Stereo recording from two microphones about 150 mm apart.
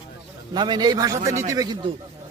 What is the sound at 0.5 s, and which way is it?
A man's voice, 30° right (ahead or behind).